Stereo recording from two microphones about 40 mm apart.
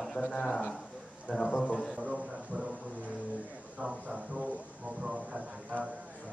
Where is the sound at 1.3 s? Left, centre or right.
Right.